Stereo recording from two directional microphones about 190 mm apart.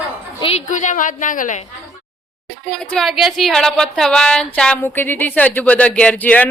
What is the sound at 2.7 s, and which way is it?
Speech, 5° left (ahead or behind).